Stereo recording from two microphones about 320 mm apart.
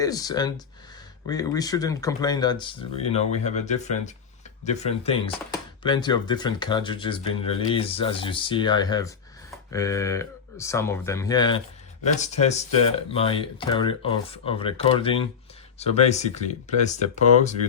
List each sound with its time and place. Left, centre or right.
0.0 s speech: centre